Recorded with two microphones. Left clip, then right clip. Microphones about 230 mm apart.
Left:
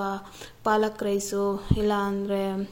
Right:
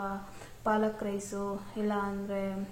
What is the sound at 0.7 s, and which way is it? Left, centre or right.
A woman's voice, left.